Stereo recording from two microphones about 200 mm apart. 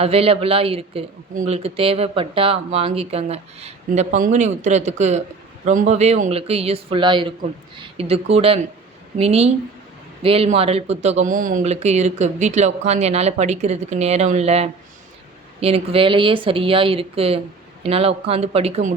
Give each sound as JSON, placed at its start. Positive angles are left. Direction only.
{"t": 0.0, "sound": "speech", "side_deg": -30}